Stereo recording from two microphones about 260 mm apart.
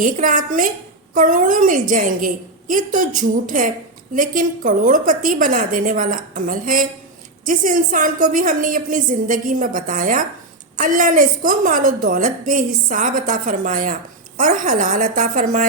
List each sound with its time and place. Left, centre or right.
0.0 s a woman's voice: right